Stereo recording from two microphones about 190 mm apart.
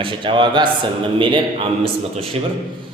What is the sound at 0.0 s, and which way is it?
A man's voice, 25° right (ahead or behind).